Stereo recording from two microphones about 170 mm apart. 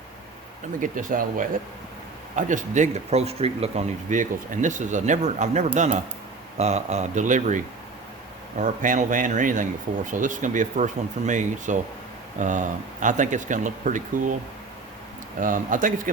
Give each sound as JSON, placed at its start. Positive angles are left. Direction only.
{"t": 0.8, "sound": "speech", "side_deg": -50}
{"t": 15.4, "sound": "speech", "side_deg": -50}